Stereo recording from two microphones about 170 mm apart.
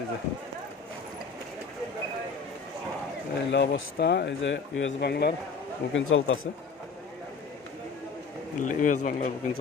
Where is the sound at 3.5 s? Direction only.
90° left; by 5.3 s 75° left (ahead or behind).